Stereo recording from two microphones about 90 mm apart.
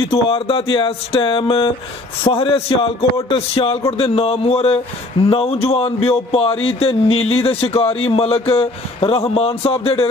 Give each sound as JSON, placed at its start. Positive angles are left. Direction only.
{"t": 0.1, "sound": "speech", "side_deg": 80}
{"t": 2.2, "sound": "speech", "side_deg": 90}